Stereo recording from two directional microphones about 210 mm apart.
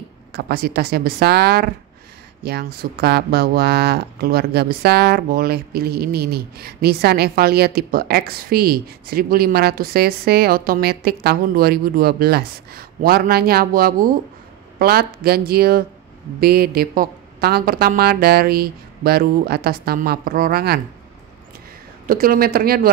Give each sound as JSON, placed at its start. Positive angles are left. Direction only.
{"t": 0.3, "sound": "speech", "side_deg": -50}
{"t": 22.0, "sound": "speech", "side_deg": -45}